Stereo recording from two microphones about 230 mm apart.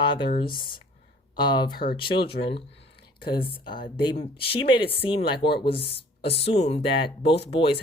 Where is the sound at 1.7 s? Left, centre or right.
Left.